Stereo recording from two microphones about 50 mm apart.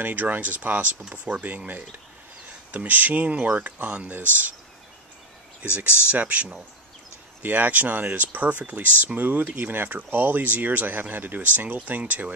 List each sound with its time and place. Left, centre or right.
0.0 s speech: right
5.8 s speech: right